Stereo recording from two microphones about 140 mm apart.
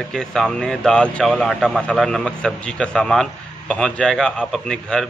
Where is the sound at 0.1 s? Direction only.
5° left (ahead or behind).